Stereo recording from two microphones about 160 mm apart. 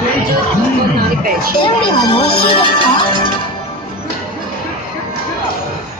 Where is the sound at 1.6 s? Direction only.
35° left (ahead or behind).